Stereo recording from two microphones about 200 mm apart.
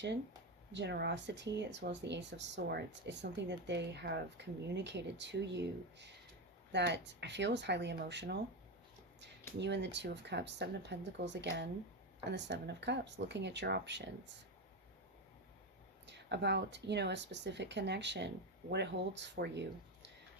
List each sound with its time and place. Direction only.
0.7 s speech: 60° right (ahead or behind)
9.6 s speech: 60° right (ahead or behind)
16.0 s speech: 60° right (ahead or behind)